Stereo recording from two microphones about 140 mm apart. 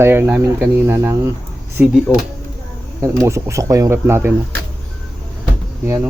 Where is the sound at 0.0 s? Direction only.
15° right (ahead or behind).